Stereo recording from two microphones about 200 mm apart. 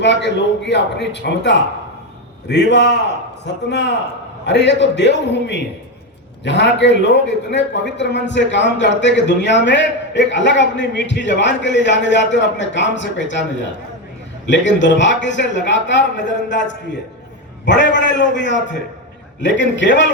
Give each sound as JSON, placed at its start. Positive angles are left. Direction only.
{"t": 0.0, "sound": "a man's voice", "side_deg": 60}